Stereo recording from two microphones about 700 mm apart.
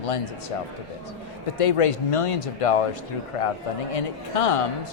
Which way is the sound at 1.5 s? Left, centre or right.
Left.